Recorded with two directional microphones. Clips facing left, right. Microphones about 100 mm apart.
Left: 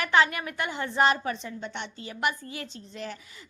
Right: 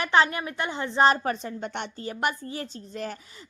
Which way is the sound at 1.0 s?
40° right (ahead or behind).